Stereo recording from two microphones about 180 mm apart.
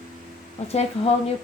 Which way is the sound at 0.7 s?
35° left (ahead or behind).